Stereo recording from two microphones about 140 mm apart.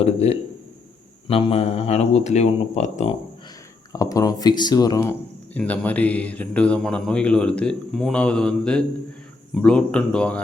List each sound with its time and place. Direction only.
0.0 s speech: 50° left (ahead or behind)
3.9 s speech: 25° left (ahead or behind)
5.5 s speech: 10° left (ahead or behind)